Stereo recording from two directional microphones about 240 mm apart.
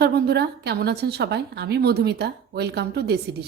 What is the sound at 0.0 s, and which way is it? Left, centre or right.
A woman's voice, right.